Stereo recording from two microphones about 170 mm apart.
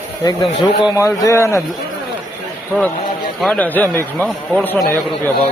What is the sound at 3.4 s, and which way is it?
A man's voice, 10° left (ahead or behind).